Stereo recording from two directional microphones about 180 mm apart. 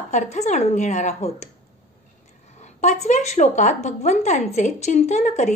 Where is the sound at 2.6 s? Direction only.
40° left (ahead or behind).